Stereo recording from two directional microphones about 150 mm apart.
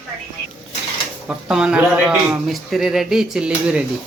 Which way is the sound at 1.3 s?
5° right (ahead or behind).